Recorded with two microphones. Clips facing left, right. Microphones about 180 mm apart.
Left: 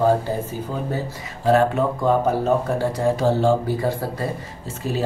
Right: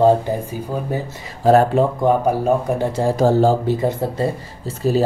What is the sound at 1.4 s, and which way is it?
Speech, 40° right (ahead or behind).